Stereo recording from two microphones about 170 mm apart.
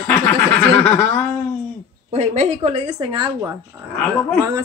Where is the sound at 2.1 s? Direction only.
40° right (ahead or behind).